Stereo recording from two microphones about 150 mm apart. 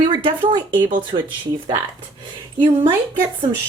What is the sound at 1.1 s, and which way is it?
Speech, 55° right (ahead or behind).